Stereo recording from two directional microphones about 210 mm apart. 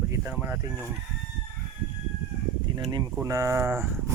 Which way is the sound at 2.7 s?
20° right (ahead or behind).